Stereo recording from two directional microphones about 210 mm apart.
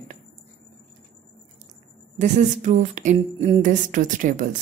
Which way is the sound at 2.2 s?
35° right (ahead or behind).